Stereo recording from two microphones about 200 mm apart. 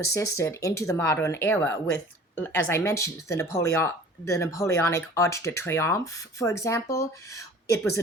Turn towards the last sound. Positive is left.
turn(degrees=15)  # may be behind; listen again after turning